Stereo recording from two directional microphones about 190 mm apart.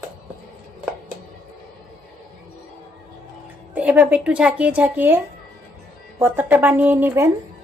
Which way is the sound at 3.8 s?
10° right (ahead or behind).